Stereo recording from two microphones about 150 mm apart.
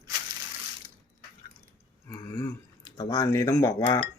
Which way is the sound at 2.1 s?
20° left (ahead or behind).